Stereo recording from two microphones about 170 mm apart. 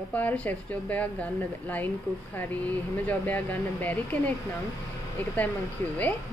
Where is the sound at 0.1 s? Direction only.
10° left (ahead or behind).